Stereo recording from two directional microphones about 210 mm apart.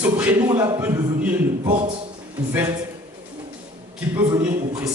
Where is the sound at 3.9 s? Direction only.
10° right (ahead or behind).